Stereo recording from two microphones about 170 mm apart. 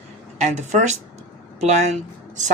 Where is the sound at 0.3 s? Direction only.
45° right (ahead or behind).